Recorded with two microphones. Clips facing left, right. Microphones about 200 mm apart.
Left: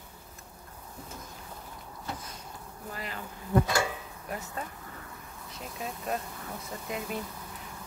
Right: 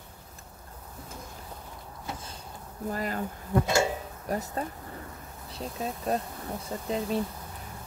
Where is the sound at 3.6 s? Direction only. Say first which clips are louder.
Right 4 dB; 25° right (ahead or behind).